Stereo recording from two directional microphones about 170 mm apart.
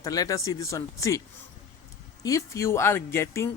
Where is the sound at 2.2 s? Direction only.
20° left (ahead or behind).